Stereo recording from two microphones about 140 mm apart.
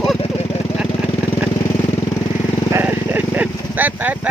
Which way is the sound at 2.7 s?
15° right (ahead or behind).